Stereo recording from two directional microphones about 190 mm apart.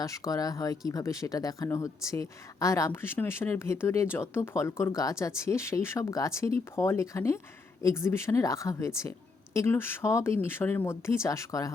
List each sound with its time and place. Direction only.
0.0 s speech: 20° left (ahead or behind)